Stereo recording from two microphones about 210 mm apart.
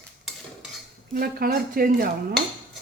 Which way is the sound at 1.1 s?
45° right (ahead or behind).